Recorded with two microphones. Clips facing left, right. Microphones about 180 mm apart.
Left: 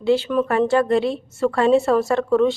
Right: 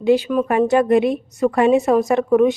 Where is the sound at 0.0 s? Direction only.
15° right (ahead or behind).